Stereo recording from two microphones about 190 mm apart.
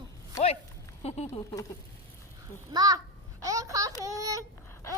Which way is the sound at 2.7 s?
20° right (ahead or behind).